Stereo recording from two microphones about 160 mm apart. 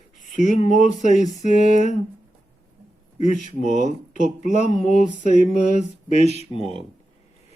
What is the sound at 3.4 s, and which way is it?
Speech, 50° left (ahead or behind).